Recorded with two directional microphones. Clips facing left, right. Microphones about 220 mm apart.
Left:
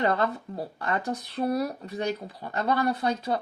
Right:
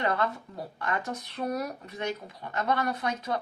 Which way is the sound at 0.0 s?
30° left (ahead or behind).